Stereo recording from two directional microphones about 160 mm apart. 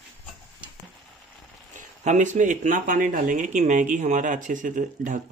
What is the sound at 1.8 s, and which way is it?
Speech, 50° right (ahead or behind).